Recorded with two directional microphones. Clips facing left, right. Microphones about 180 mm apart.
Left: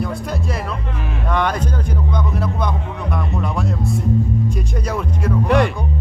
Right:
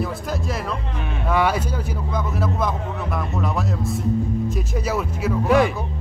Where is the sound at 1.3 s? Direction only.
5° right (ahead or behind).